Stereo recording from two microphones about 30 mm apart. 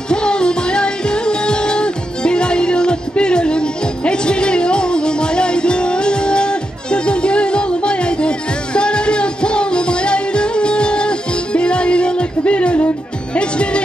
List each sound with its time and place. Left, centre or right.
0.1 s music: left